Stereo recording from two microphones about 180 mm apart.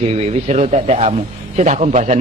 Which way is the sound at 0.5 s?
40° right (ahead or behind).